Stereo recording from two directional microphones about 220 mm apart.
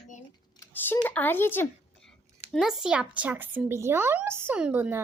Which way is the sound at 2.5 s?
Centre (ahead or behind).